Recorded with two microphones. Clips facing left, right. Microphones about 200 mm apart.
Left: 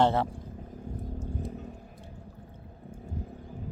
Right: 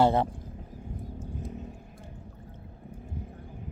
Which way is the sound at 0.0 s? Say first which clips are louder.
Right 2 dB; 15° right (ahead or behind).